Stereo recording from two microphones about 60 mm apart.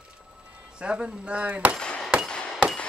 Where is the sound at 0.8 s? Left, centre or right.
Centre.